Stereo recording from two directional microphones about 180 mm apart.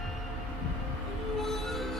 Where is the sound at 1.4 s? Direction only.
Centre (ahead or behind).